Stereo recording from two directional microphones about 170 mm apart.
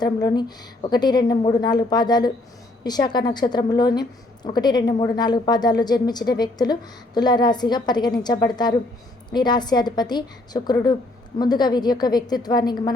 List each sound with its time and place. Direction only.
0.0 s a woman's voice: 25° left (ahead or behind)